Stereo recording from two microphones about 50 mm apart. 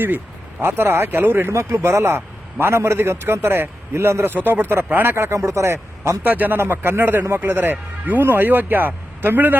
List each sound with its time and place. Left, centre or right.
0.6 s speech: right
3.9 s speech: right
4.4 s speech: right
5.1 s speech: right
6.2 s speech: right
6.6 s speech: right